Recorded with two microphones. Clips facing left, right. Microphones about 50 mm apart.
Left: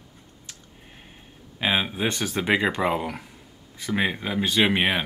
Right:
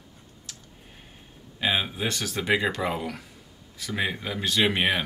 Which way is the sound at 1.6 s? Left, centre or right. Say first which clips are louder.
Left 2 dB; left.